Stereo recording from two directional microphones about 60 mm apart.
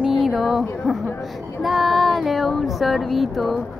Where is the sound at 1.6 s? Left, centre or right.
Centre.